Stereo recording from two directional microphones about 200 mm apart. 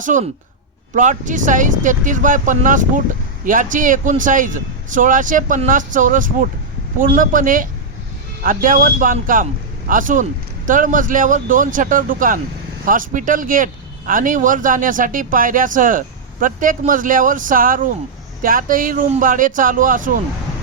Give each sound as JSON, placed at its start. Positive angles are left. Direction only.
{"t": 0.0, "sound": "speech", "side_deg": -40}